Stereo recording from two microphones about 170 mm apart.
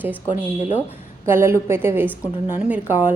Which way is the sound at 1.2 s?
15° right (ahead or behind).